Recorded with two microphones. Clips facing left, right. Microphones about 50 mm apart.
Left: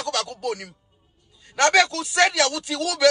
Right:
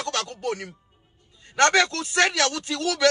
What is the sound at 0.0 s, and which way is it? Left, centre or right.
Speech, right.